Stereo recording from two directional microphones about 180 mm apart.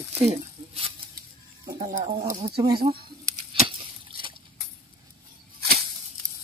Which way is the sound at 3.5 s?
30° right (ahead or behind).